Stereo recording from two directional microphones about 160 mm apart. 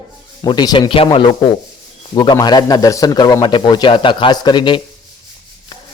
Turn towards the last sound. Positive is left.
turn(degrees=30)  # may be behind; listen again after turning